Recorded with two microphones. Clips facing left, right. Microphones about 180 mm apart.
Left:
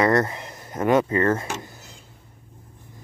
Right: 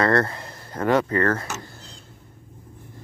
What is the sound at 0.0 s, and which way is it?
Speech, 15° left (ahead or behind).